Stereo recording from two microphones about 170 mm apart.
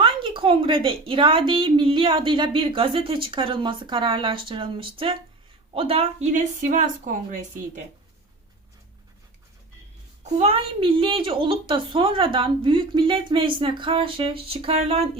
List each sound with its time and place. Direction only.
0.0 s a woman's voice: 30° right (ahead or behind); by 7.3 s 50° right (ahead or behind)
10.3 s speech: 35° right (ahead or behind)